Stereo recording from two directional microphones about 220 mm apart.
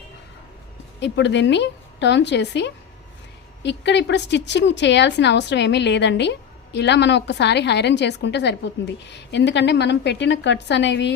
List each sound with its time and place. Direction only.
0.9 s a woman's voice: 55° left (ahead or behind)